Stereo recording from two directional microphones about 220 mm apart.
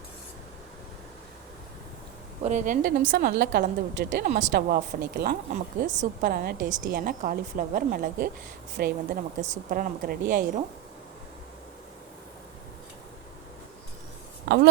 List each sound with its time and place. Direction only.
2.4 s a woman's voice: 35° right (ahead or behind)
14.4 s speech: 50° right (ahead or behind)